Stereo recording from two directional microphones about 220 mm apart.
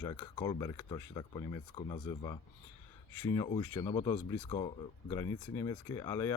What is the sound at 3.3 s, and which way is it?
Speech, 20° left (ahead or behind).